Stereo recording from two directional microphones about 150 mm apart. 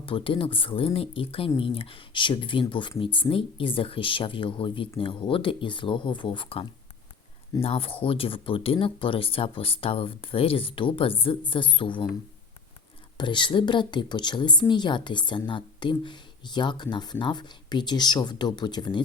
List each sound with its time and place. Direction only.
0.0 s speech: 35° left (ahead or behind)
13.1 s speech: 30° left (ahead or behind)